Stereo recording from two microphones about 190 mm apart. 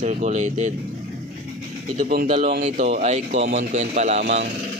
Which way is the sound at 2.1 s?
45° right (ahead or behind).